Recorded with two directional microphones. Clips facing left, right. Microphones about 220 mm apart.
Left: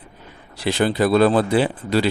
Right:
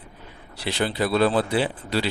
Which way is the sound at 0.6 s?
50° left (ahead or behind).